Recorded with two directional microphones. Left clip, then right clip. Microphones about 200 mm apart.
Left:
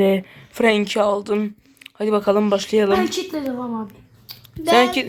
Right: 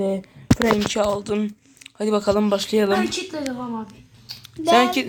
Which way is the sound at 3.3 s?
40° left (ahead or behind).